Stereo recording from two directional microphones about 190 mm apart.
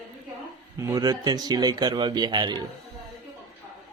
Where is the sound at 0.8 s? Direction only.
20° right (ahead or behind).